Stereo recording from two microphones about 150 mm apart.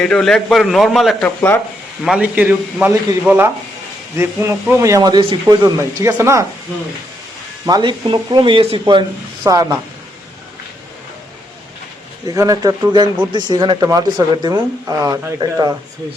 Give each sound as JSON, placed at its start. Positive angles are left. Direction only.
{"t": 0.0, "sound": "a man's voice", "side_deg": 5}
{"t": 1.4, "sound": "speech", "side_deg": 15}
{"t": 2.0, "sound": "speech", "side_deg": -10}
{"t": 7.6, "sound": "speech", "side_deg": -30}
{"t": 12.3, "sound": "speech", "side_deg": -25}